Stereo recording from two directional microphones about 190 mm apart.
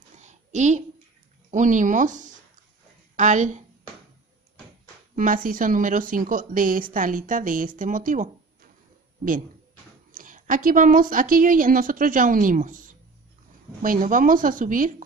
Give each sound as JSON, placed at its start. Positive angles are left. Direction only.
{"t": 0.2, "sound": "a sound", "side_deg": -40}
{"t": 1.5, "sound": "speech", "side_deg": -40}
{"t": 5.1, "sound": "a woman's voice", "side_deg": -45}
{"t": 10.1, "sound": "a woman's voice", "side_deg": -45}